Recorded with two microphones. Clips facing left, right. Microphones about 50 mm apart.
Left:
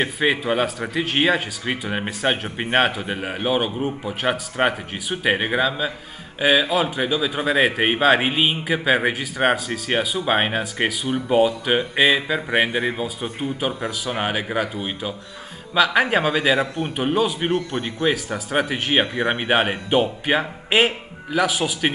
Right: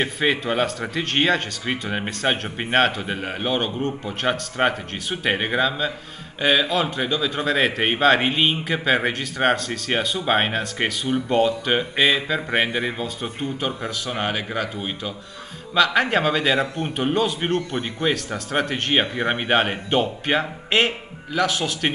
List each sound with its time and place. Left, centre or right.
0.0 s a man's voice: centre